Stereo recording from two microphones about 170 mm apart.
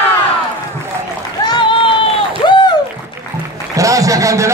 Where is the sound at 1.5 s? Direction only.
30° left (ahead or behind).